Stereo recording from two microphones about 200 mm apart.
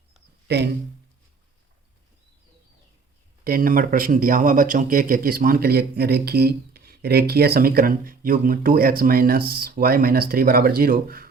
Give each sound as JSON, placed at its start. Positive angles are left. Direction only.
{"t": 0.4, "sound": "speech", "side_deg": -55}
{"t": 3.4, "sound": "speech", "side_deg": -45}